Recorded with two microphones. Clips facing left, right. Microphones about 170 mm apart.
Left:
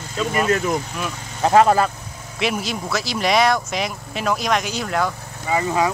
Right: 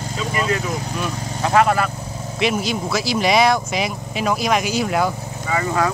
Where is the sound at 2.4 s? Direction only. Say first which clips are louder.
Right 3 dB; centre (ahead or behind).